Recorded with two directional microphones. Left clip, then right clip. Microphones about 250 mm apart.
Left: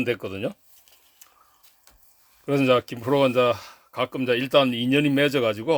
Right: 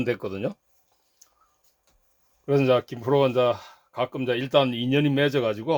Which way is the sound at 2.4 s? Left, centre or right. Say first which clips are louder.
Left 1 dB; centre.